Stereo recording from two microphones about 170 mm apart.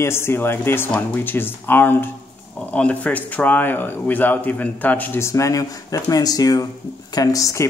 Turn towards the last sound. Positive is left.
turn(degrees=20)  # may be behind; listen again after turning